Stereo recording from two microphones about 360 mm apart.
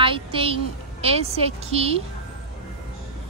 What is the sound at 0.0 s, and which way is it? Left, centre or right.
A woman's voice, centre.